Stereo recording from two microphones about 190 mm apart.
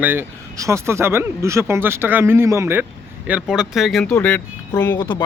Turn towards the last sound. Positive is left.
turn(degrees=10)  # may be behind; listen again after turning